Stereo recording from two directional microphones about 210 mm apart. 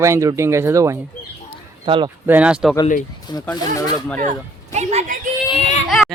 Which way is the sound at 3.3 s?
20° left (ahead or behind).